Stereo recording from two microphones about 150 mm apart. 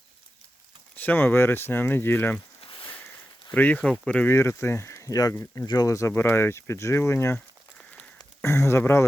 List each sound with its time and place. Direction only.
0.9 s speech: 10° left (ahead or behind)
2.6 s a sound: 35° left (ahead or behind)
3.5 s speech: 10° left (ahead or behind)
8.4 s speech: 20° left (ahead or behind)